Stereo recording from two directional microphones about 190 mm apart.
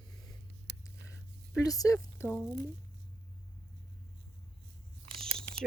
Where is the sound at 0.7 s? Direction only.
65° right (ahead or behind).